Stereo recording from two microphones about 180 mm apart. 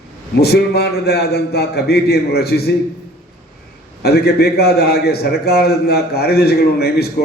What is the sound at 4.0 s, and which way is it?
A man's voice, 60° left (ahead or behind).